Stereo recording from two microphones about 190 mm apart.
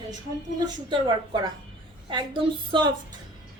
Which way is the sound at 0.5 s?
25° right (ahead or behind).